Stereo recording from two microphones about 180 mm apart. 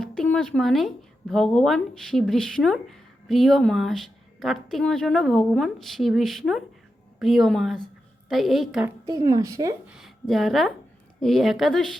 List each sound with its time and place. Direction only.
0.0 s music: 5° left (ahead or behind)
1.3 s speech: centre (ahead or behind)
9.0 s a woman's voice: 20° right (ahead or behind)
9.8 s speech: 5° right (ahead or behind)